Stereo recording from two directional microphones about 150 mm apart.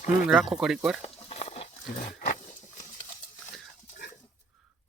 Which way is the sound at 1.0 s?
45° left (ahead or behind).